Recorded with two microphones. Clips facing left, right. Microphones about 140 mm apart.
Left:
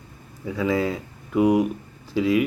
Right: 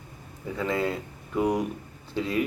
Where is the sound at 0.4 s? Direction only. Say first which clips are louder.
Left 4 dB; 5° left (ahead or behind).